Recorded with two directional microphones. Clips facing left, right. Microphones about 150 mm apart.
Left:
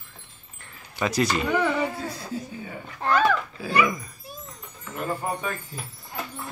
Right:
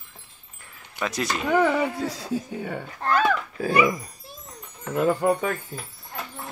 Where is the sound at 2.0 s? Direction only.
80° right.